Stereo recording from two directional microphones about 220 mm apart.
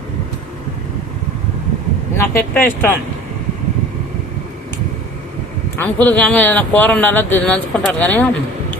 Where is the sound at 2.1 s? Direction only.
10° left (ahead or behind).